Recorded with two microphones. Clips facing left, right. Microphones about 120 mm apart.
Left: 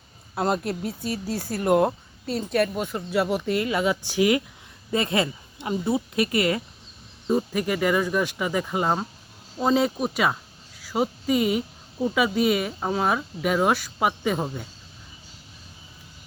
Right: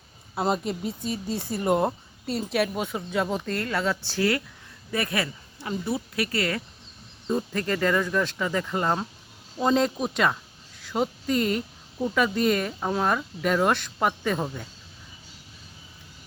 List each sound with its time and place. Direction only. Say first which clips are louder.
0.3 s speech: left 1 dB; centre (ahead or behind)